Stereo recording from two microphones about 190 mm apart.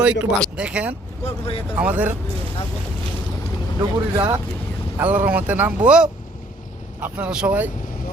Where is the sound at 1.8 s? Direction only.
5° right (ahead or behind).